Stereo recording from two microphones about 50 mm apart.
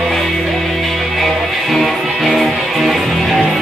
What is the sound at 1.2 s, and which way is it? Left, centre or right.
Music, centre.